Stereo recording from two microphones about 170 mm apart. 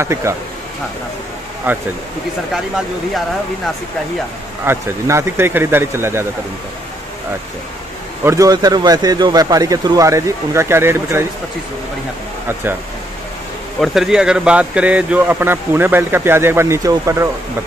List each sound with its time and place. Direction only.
0.0 s speech: 15° right (ahead or behind)
1.7 s speech: 10° right (ahead or behind)
4.6 s speech: 15° right (ahead or behind)
8.2 s speech: 20° right (ahead or behind)
13.7 s speech: centre (ahead or behind); by 17.3 s 15° right (ahead or behind)